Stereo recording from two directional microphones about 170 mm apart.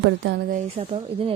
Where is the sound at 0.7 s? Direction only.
35° right (ahead or behind).